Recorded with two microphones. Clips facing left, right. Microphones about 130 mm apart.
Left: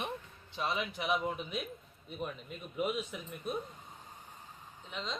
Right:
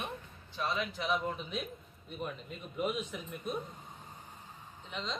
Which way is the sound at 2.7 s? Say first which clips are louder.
Even; centre (ahead or behind).